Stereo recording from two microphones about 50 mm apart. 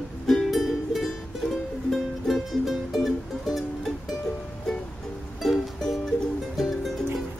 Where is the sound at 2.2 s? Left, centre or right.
Centre.